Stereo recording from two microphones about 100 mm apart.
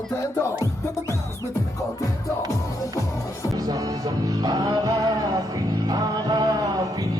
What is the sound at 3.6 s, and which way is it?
Music, 40° right (ahead or behind).